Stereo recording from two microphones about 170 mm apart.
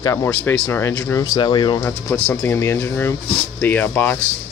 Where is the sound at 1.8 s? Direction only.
10° left (ahead or behind).